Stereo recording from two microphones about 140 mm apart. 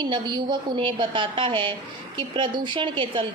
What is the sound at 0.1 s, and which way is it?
A woman's voice, 30° right (ahead or behind).